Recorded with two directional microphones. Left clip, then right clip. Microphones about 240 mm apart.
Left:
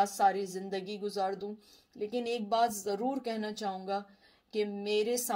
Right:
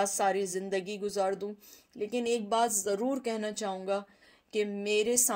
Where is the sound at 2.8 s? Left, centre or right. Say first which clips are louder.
Right 3 dB; right.